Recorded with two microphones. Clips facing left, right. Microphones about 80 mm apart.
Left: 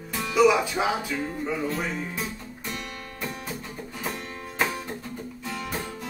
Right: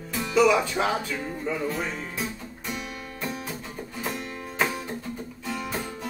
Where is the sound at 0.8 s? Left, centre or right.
Centre.